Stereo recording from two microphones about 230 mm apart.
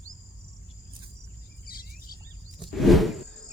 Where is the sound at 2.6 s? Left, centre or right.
Centre.